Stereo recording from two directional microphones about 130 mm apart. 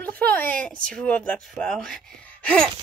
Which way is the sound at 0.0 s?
15° left (ahead or behind).